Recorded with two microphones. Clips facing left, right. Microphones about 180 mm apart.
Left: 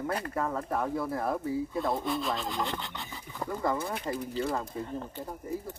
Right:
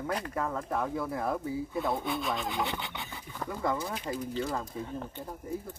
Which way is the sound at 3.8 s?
55° left (ahead or behind).